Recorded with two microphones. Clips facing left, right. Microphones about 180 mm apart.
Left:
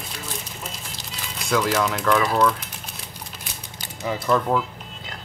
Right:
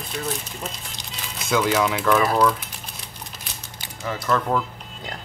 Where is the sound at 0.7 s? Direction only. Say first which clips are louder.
Left 1 dB; centre (ahead or behind).